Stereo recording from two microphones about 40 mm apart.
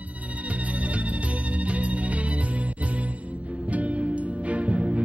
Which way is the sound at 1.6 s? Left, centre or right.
Right.